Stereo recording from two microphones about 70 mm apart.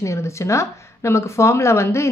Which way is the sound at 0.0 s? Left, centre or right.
Left.